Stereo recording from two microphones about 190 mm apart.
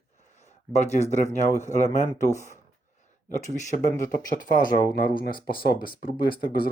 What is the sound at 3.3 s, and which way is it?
Speech, 40° left (ahead or behind).